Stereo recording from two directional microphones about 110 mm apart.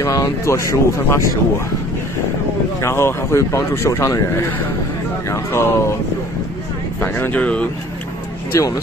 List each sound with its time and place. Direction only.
0.0 s speech: 25° left (ahead or behind)
2.8 s speech: 25° left (ahead or behind)
7.0 s speech: 15° left (ahead or behind)
8.5 s speech: 30° left (ahead or behind)